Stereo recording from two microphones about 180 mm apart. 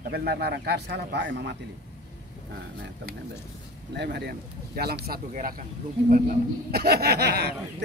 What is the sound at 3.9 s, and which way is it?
A man's voice, 65° right (ahead or behind).